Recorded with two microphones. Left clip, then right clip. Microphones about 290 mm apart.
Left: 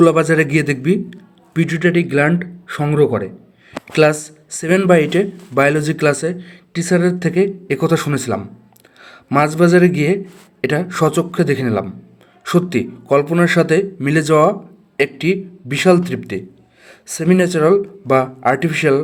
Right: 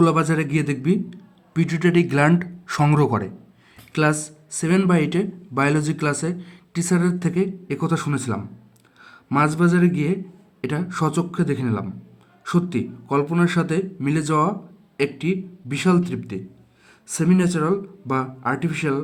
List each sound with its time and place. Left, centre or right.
0.0 s a man's voice: centre; by 3.8 s right
3.9 s speech: centre